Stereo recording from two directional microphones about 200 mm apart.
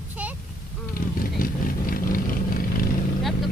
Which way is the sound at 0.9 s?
45° left (ahead or behind).